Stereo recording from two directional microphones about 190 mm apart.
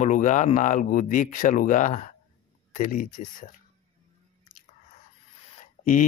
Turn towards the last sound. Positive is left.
turn(degrees=45)  # may be behind; listen again after turning